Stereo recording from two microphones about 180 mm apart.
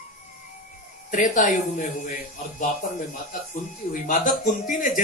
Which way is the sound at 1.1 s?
45° left (ahead or behind).